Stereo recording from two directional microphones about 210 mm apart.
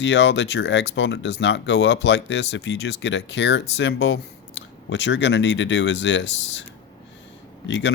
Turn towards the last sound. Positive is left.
turn(degrees=60)  # may be behind; listen again after turning